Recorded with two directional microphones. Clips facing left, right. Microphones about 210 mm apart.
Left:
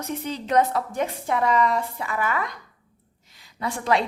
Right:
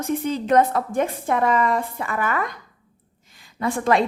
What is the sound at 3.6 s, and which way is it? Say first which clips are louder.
Speech: right 4 dB; 50° right (ahead or behind).